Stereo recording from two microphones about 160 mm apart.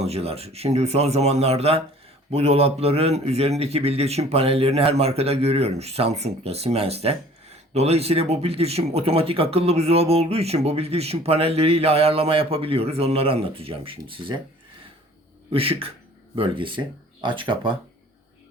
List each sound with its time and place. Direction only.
0.0 s speech: 40° right (ahead or behind)
15.5 s speech: 35° right (ahead or behind)